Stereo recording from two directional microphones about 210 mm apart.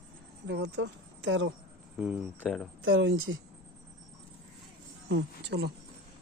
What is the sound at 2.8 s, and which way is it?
Speech, 65° right (ahead or behind).